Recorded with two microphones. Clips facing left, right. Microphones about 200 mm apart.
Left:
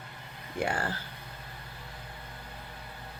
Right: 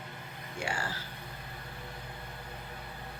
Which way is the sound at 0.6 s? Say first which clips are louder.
Left 5 dB; 55° left (ahead or behind).